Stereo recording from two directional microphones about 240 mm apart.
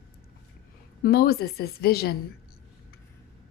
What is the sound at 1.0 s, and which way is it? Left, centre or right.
A woman's voice, left.